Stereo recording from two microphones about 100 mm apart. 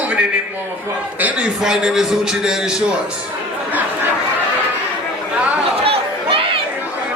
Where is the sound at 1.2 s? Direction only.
15° right (ahead or behind).